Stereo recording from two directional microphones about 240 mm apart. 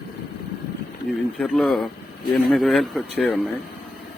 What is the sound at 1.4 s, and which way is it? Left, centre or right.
Speech, centre.